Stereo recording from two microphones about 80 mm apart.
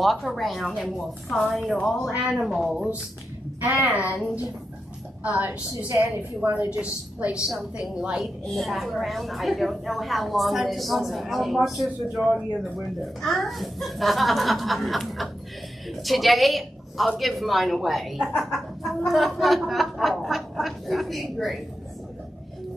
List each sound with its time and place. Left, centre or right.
0.0 s a woman's voice: centre
3.9 s a woman's voice: centre
8.5 s a woman's voice: centre